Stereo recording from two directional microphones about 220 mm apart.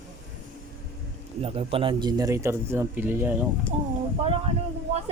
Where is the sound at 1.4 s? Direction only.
25° right (ahead or behind); by 3.3 s 10° right (ahead or behind).